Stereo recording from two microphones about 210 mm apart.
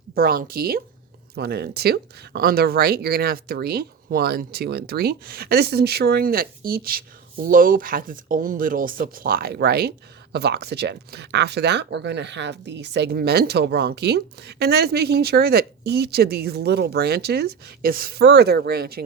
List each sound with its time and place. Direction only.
0.1 s speech: 45° right (ahead or behind)